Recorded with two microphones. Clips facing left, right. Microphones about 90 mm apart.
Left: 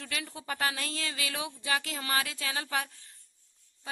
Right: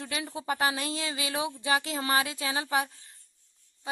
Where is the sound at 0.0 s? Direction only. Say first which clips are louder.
Right 5 dB; 25° right (ahead or behind).